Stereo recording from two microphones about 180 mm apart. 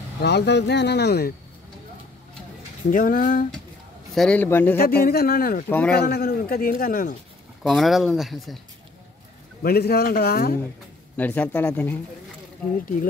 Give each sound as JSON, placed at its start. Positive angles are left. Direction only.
{"t": 0.2, "sound": "speech", "side_deg": 70}
{"t": 2.9, "sound": "speech", "side_deg": 50}
{"t": 4.1, "sound": "speech", "side_deg": 5}
{"t": 5.0, "sound": "a man's voice", "side_deg": 55}
{"t": 5.7, "sound": "speech", "side_deg": 10}
{"t": 5.9, "sound": "a man's voice", "side_deg": 60}
{"t": 7.6, "sound": "speech", "side_deg": 0}
{"t": 9.6, "sound": "a man's voice", "side_deg": 60}
{"t": 11.1, "sound": "speech", "side_deg": 10}